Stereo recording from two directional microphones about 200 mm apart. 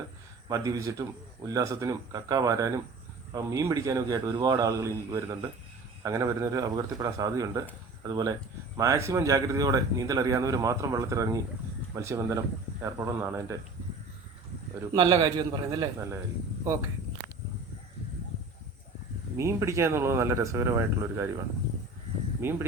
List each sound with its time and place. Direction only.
0.4 s speech: 20° right (ahead or behind)
14.9 s a man's voice: 20° right (ahead or behind)
19.4 s speech: 15° right (ahead or behind)
22.4 s speech: 10° right (ahead or behind)